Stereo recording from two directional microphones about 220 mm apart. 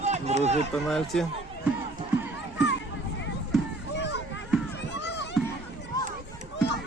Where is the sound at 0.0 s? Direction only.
30° right (ahead or behind).